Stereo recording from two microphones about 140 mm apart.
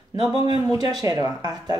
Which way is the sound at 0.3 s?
30° right (ahead or behind).